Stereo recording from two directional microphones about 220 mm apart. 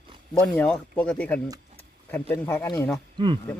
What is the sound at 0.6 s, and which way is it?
Speech, 5° left (ahead or behind).